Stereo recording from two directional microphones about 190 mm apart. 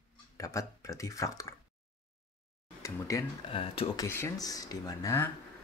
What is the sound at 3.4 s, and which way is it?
Speech, 30° left (ahead or behind).